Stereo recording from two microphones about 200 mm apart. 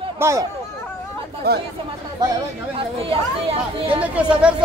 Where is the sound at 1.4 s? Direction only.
50° right (ahead or behind).